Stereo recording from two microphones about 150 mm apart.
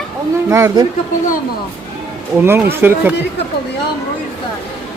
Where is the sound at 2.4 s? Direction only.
15° right (ahead or behind).